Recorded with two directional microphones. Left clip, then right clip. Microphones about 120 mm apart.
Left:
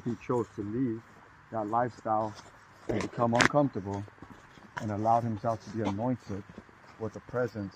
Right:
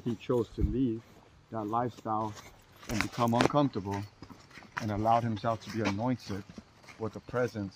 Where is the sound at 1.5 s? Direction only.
20° right (ahead or behind).